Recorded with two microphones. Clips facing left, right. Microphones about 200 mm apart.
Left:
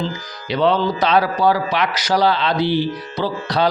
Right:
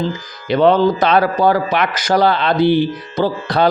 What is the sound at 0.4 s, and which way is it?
Speech, 50° right (ahead or behind).